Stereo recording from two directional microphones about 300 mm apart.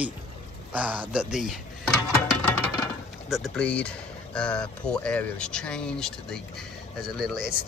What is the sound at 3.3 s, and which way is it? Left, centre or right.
Speech, centre.